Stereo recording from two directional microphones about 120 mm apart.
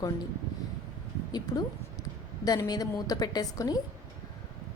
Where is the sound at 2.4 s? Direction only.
30° left (ahead or behind).